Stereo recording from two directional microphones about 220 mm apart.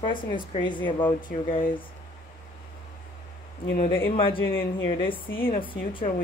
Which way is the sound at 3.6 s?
40° left (ahead or behind).